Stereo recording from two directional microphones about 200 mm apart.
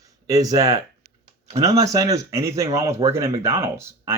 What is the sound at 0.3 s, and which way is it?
Speech, 20° right (ahead or behind).